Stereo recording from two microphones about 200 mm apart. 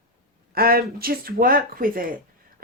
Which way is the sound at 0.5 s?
50° right (ahead or behind).